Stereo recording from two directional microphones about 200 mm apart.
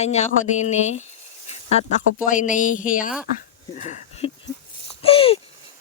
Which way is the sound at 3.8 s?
35° left (ahead or behind).